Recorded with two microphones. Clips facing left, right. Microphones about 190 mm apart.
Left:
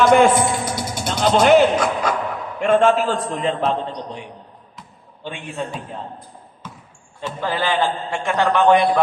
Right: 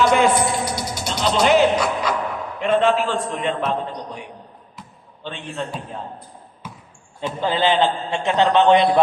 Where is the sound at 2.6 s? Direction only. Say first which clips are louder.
Left 2 dB; 45° left (ahead or behind).